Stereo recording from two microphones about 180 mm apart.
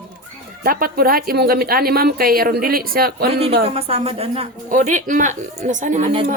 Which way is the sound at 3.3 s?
35° right (ahead or behind).